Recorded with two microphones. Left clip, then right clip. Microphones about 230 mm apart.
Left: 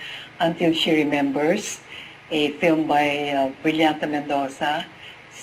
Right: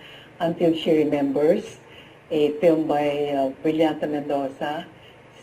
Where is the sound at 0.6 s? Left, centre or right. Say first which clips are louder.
Right 2 dB; centre.